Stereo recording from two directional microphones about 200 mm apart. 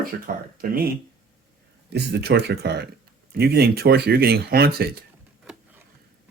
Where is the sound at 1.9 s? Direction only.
55° right (ahead or behind).